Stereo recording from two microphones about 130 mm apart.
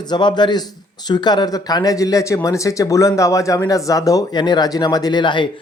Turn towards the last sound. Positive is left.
turn(degrees=35)  # may be behind; listen again after turning